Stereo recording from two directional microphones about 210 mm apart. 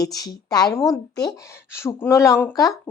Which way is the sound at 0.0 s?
15° left (ahead or behind).